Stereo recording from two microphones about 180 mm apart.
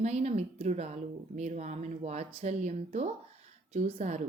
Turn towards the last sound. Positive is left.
turn(degrees=-40)  # may be behind; listen again after turning